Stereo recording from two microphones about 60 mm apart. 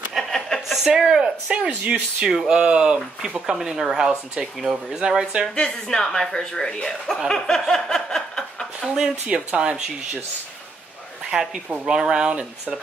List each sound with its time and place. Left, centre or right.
0.1 s a sound: centre
0.7 s speech: centre; by 2.2 s right
2.2 s speech: centre
5.5 s a woman's voice: centre
7.2 s snicker: centre
8.8 s speech: centre
9.3 s speech: centre
11.2 s speech: centre